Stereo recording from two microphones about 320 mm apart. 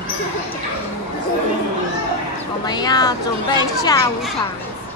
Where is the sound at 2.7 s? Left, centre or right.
Centre.